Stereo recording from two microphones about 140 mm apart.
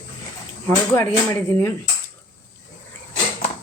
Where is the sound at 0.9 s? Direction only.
15° left (ahead or behind).